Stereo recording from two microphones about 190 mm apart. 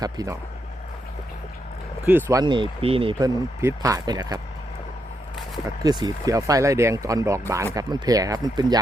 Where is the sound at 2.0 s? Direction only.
10° right (ahead or behind).